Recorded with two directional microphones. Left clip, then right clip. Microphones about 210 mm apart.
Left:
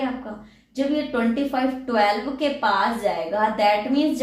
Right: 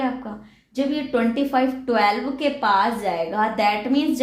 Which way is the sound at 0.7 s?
55° right (ahead or behind).